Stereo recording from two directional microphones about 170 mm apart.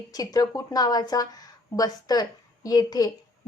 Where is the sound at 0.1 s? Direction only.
20° left (ahead or behind).